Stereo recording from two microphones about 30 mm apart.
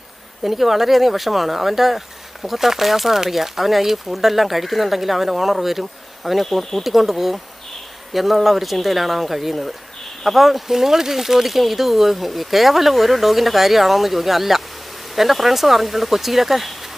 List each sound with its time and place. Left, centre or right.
0.4 s speech: centre
6.8 s speech: centre